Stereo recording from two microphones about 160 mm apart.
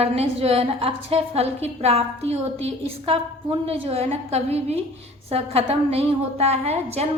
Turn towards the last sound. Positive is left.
turn(degrees=-40)  # may be behind; listen again after turning